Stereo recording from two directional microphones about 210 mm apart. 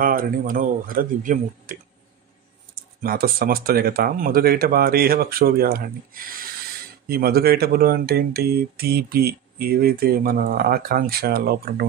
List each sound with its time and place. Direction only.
0.0 s speech: 40° right (ahead or behind)
3.0 s speech: 45° right (ahead or behind)